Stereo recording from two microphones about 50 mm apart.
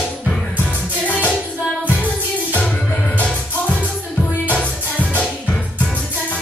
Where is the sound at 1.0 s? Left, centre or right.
Left.